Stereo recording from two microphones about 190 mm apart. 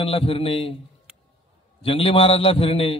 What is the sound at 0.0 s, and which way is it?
Speech, 30° left (ahead or behind).